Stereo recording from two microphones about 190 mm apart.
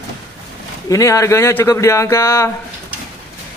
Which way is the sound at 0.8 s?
15° left (ahead or behind).